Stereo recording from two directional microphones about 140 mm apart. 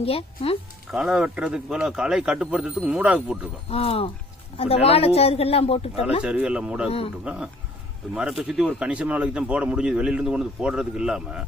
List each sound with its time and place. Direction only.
0.0 s speech: 45° left (ahead or behind)
0.9 s speech: 5° right (ahead or behind)
3.7 s speech: 45° left (ahead or behind)
6.2 s speech: 5° right (ahead or behind)